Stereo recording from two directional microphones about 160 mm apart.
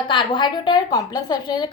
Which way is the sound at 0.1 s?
30° left (ahead or behind).